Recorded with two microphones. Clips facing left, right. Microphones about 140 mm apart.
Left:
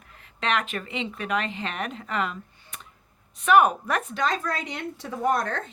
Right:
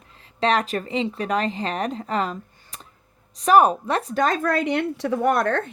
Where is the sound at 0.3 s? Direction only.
35° right (ahead or behind).